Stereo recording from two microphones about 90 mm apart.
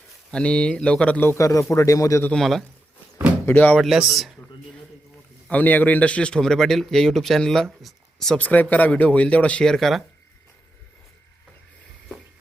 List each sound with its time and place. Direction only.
0.3 s speech: 10° left (ahead or behind)
1.2 s speech: 25° left (ahead or behind)
1.7 s speech: 40° left (ahead or behind)
2.3 s a man's voice: centre (ahead or behind)
3.4 s speech: 20° left (ahead or behind)
3.8 s a man's voice: centre (ahead or behind)
5.5 s a man's voice: 20° left (ahead or behind); by 8.4 s centre (ahead or behind)
8.4 s speech: 20° left (ahead or behind)